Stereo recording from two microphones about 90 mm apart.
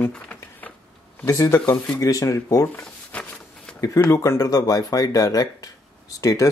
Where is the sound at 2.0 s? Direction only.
40° left (ahead or behind).